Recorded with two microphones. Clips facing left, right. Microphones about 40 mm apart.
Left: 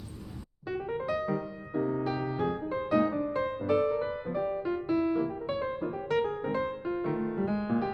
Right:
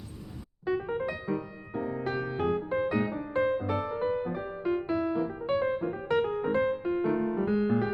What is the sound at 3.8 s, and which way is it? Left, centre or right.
Music, centre.